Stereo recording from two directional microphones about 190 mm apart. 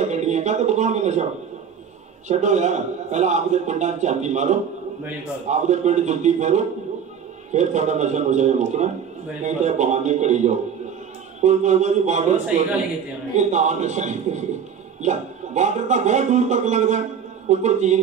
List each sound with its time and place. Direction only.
0.0 s speech: 40° right (ahead or behind)
2.2 s a man's voice: 40° right (ahead or behind)
13.4 s a man's voice: 40° right (ahead or behind)